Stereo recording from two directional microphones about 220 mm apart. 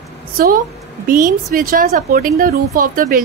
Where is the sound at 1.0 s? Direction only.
40° right (ahead or behind).